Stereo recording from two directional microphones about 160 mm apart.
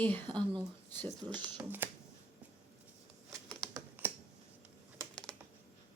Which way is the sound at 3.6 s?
25° right (ahead or behind).